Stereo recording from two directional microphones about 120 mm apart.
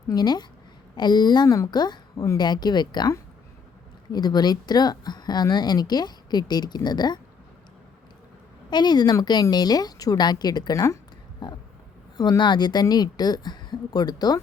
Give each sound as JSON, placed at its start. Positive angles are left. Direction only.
{"t": 0.1, "sound": "speech", "side_deg": 35}
{"t": 8.7, "sound": "speech", "side_deg": 35}